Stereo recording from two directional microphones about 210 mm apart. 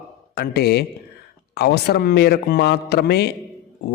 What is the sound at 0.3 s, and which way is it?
A man's voice, 50° left (ahead or behind).